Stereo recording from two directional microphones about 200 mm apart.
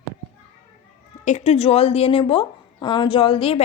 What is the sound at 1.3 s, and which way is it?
A woman's voice, 30° left (ahead or behind).